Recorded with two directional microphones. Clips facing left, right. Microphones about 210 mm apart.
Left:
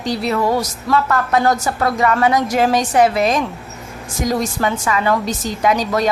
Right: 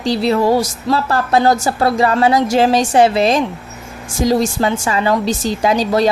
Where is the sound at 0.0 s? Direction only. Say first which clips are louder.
Right 4 dB; 30° right (ahead or behind).